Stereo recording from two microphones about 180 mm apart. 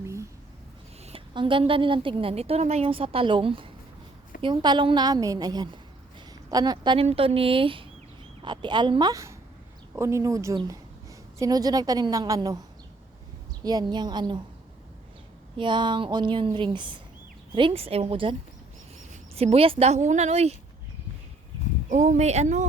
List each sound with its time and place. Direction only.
0.0 s a sound: 15° right (ahead or behind)
1.0 s a woman's voice: 30° right (ahead or behind)
13.7 s a woman's voice: 25° right (ahead or behind)
15.5 s a woman's voice: 25° right (ahead or behind)
19.4 s a woman's voice: 35° right (ahead or behind)
21.8 s a woman's voice: 40° right (ahead or behind)